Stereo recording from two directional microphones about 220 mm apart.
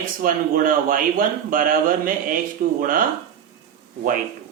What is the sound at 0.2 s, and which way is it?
Speech, 40° right (ahead or behind).